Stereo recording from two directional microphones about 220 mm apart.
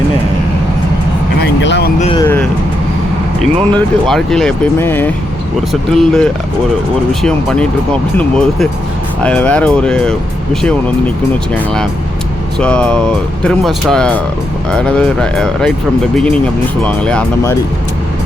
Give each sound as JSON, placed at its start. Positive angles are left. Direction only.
{"t": 1.4, "sound": "speech", "side_deg": 50}
{"t": 2.0, "sound": "speech", "side_deg": 25}
{"t": 2.2, "sound": "speech", "side_deg": 10}
{"t": 12.5, "sound": "speech", "side_deg": 5}
{"t": 16.8, "sound": "speech", "side_deg": 5}